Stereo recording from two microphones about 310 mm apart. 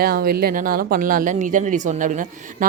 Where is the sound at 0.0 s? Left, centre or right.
Right.